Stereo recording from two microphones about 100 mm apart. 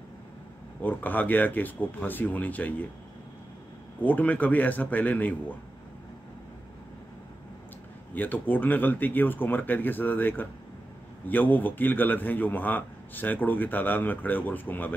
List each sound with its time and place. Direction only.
0.8 s a man's voice: 15° left (ahead or behind)
4.0 s a man's voice: 15° left (ahead or behind)
8.1 s a man's voice: 15° left (ahead or behind)